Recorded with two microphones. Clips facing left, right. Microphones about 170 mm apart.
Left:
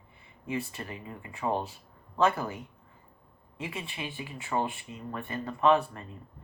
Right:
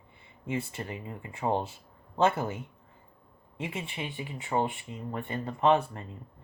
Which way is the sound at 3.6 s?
20° right (ahead or behind).